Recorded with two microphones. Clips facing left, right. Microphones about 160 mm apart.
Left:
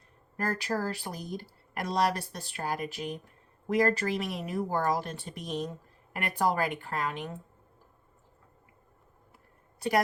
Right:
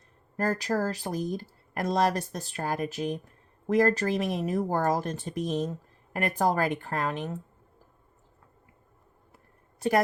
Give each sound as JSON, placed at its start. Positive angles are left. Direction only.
{"t": 0.3, "sound": "speech", "side_deg": -45}